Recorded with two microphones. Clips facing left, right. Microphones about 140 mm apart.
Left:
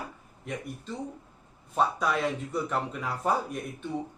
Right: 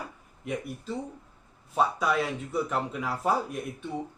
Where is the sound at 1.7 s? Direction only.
Centre (ahead or behind).